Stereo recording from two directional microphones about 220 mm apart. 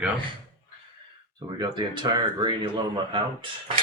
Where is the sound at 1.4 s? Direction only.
20° right (ahead or behind).